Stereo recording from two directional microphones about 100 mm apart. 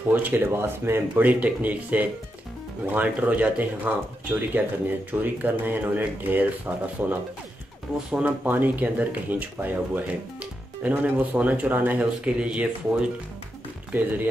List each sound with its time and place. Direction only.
0.1 s speech: 20° right (ahead or behind)